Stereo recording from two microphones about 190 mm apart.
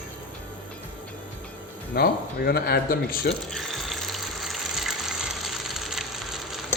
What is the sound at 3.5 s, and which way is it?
Water, centre (ahead or behind).